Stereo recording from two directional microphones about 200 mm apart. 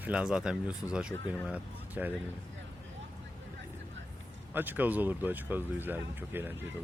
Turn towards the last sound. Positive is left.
turn(degrees=-10)  # may be behind; listen again after turning